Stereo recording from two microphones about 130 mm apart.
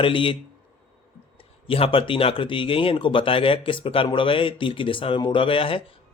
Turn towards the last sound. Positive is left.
turn(degrees=45)  # may be behind; listen again after turning